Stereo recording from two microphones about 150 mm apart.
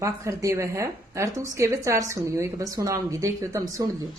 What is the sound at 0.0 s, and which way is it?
A woman's voice, 20° right (ahead or behind).